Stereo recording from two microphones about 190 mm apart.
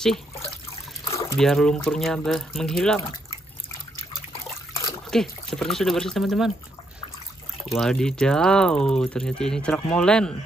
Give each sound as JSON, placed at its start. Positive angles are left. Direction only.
{"t": 1.4, "sound": "speech", "side_deg": 5}
{"t": 4.3, "sound": "water", "side_deg": 30}
{"t": 5.1, "sound": "speech", "side_deg": 0}
{"t": 7.6, "sound": "speech", "side_deg": 0}